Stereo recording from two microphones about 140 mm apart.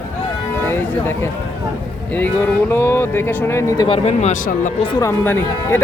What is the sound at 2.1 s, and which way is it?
Speech, 10° left (ahead or behind).